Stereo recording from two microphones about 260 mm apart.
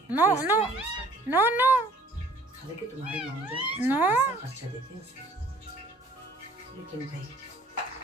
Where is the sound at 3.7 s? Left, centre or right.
Centre.